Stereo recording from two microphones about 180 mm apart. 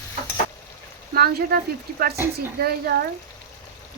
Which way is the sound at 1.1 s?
55° right (ahead or behind).